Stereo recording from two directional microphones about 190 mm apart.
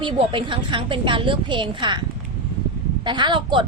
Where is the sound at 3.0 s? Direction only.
25° right (ahead or behind).